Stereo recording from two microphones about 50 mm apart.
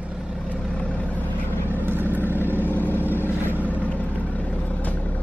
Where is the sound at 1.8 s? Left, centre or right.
Right.